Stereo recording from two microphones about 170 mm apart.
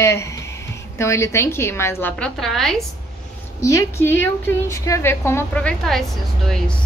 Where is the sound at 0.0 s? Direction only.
15° left (ahead or behind).